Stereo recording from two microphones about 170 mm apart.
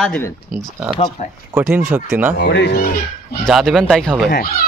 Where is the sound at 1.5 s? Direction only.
10° right (ahead or behind).